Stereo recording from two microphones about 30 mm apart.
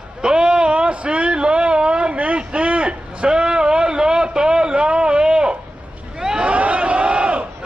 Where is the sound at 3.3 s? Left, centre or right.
Right.